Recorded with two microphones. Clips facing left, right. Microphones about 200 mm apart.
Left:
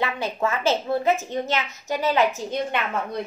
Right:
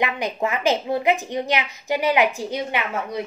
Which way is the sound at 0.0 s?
15° right (ahead or behind).